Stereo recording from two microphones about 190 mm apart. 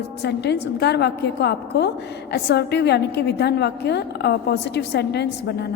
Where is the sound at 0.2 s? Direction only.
65° left (ahead or behind).